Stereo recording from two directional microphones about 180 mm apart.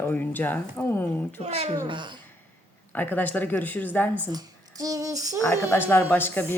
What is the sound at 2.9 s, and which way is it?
Speech, 10° left (ahead or behind).